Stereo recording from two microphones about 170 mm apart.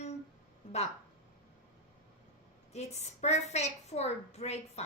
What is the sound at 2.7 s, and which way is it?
A child's voice, 40° left (ahead or behind).